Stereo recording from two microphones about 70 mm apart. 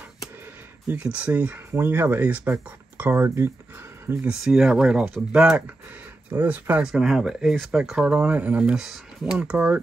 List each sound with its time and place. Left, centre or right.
0.9 s speech: centre
2.2 s speech: right
4.3 s speech: centre
6.3 s speech: right
6.8 s speech: centre
9.4 s speech: centre